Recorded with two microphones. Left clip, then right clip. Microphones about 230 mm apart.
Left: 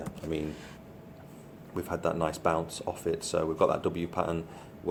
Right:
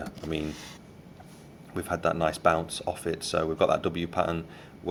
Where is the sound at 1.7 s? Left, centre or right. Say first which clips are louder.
Right 3 dB; right.